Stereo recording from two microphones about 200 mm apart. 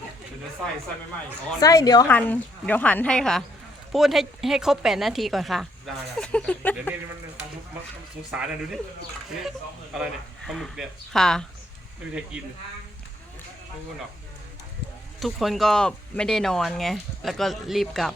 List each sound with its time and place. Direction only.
1.5 s speech: 20° left (ahead or behind)
2.0 s a woman's voice: 10° left (ahead or behind)
8.3 s a woman's voice: 5° right (ahead or behind)
15.2 s a woman's voice: centre (ahead or behind)